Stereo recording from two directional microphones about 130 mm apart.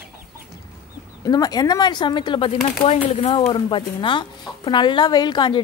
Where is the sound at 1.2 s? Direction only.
30° left (ahead or behind); by 3.4 s 50° left (ahead or behind).